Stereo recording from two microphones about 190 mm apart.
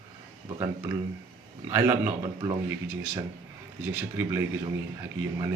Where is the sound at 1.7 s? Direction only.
10° right (ahead or behind).